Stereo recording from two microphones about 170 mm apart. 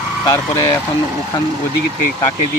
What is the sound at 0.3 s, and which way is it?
Speech, 20° left (ahead or behind).